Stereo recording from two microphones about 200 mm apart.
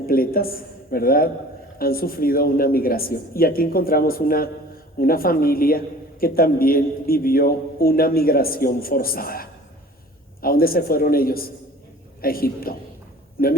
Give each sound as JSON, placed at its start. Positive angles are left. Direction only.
{"t": 0.1, "sound": "a man's voice", "side_deg": 45}